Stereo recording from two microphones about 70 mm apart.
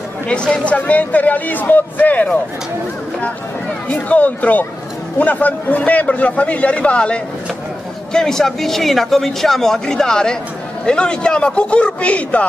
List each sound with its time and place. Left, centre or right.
0.3 s speech: centre
3.9 s speech: centre